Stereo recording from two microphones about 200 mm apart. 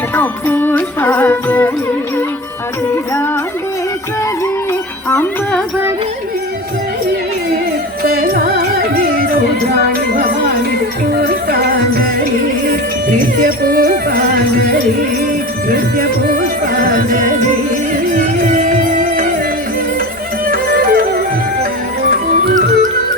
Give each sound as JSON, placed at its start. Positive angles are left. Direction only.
{"t": 0.1, "sound": "music", "side_deg": 10}
{"t": 4.7, "sound": "music", "side_deg": 10}
{"t": 8.0, "sound": "music", "side_deg": -45}
{"t": 20.5, "sound": "music", "side_deg": -45}